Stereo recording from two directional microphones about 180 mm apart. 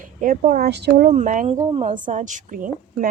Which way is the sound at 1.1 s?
45° right (ahead or behind).